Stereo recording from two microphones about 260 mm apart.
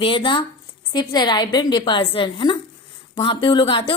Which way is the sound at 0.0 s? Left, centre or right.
Centre.